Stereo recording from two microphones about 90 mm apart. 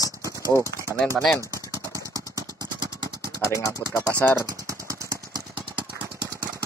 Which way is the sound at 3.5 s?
35° left (ahead or behind).